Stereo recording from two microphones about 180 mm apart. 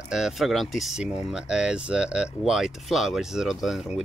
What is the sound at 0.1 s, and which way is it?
Speech, centre (ahead or behind).